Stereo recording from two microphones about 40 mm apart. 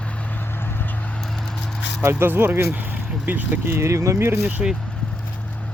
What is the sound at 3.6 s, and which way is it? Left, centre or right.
Speech, right.